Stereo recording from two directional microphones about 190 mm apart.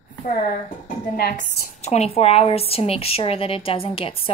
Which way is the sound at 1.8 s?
35° left (ahead or behind).